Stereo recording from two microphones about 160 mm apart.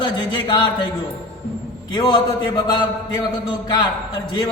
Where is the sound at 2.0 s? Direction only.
30° left (ahead or behind).